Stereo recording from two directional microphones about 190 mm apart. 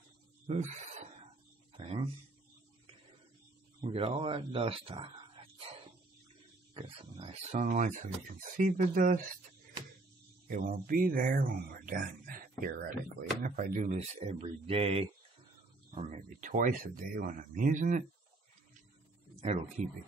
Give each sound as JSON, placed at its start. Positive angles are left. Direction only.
{"t": 0.5, "sound": "speech", "side_deg": -35}
{"t": 1.8, "sound": "a sound", "side_deg": -30}
{"t": 3.9, "sound": "speech", "side_deg": -30}
{"t": 6.7, "sound": "speech", "side_deg": -30}
{"t": 10.5, "sound": "speech", "side_deg": -50}